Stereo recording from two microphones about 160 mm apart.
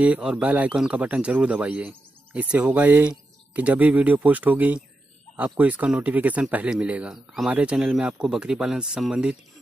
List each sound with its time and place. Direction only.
0.0 s speech: 5° right (ahead or behind)